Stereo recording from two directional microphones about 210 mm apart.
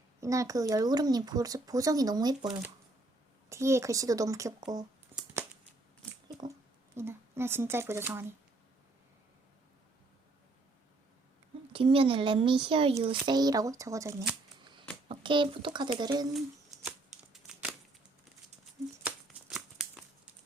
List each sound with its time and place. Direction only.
0.2 s speech: 15° right (ahead or behind)
5.1 s scissors: 10° right (ahead or behind)
6.9 s speech: 10° right (ahead or behind)
11.7 s speech: 25° right (ahead or behind)
17.3 s a sound: 5° right (ahead or behind)
19.0 s a sound: 5° right (ahead or behind)